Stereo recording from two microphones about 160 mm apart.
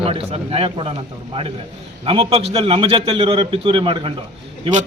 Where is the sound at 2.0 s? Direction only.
35° right (ahead or behind).